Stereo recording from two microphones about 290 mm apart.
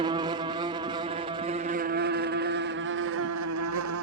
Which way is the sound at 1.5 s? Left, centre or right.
Right.